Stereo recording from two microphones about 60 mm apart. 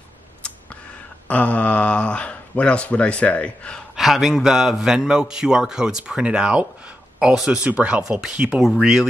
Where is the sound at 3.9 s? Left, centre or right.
Centre.